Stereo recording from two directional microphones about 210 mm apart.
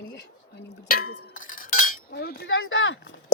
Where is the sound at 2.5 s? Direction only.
70° left (ahead or behind).